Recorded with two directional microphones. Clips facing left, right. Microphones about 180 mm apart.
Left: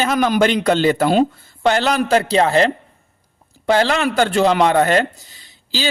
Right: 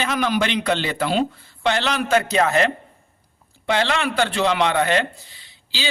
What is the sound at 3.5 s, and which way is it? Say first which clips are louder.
A man's voice: left 5 dB; 40° left (ahead or behind).